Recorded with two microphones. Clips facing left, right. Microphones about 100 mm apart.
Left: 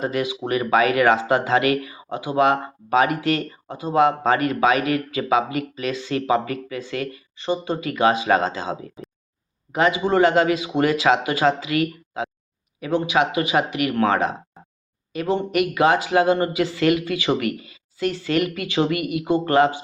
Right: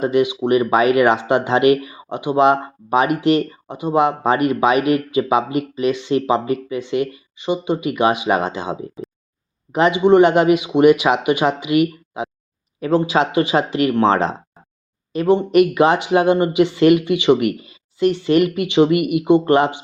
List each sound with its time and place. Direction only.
0.0 s speech: 20° right (ahead or behind)
12.8 s speech: 30° right (ahead or behind)